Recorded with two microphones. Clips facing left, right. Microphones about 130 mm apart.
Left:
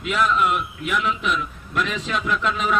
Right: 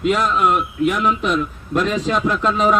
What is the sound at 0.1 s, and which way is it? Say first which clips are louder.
Speech: right 2 dB; 40° right (ahead or behind).